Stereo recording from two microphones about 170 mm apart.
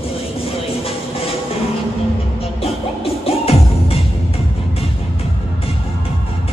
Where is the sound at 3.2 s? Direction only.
35° left (ahead or behind).